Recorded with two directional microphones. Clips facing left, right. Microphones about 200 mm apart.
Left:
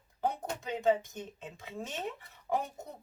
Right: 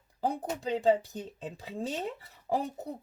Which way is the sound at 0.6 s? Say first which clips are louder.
Right 3 dB; 35° right (ahead or behind).